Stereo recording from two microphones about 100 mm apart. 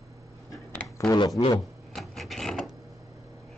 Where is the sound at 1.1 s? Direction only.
40° left (ahead or behind).